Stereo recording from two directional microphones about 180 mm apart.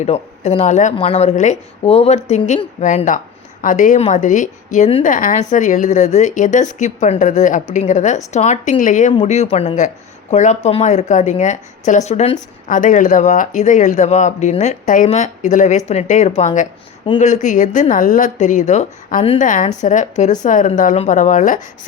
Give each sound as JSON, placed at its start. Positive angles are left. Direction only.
{"t": 0.0, "sound": "a woman's voice", "side_deg": 35}
{"t": 19.4, "sound": "a woman's voice", "side_deg": 45}